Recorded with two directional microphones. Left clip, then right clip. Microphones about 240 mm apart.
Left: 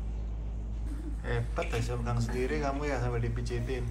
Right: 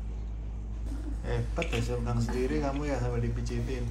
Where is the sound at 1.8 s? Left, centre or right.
Centre.